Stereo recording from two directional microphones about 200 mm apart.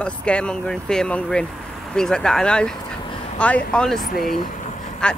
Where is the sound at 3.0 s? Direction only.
25° left (ahead or behind).